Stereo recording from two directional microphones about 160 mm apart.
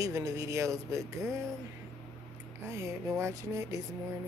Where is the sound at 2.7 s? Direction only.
15° right (ahead or behind).